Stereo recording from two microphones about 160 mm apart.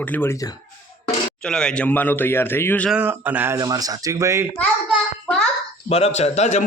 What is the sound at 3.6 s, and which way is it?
Speech, 25° right (ahead or behind).